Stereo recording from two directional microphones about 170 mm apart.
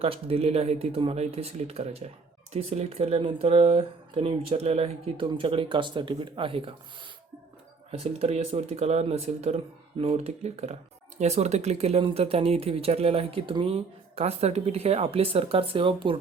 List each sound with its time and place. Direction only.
0.0 s speech: 35° right (ahead or behind)
7.9 s speech: 35° right (ahead or behind)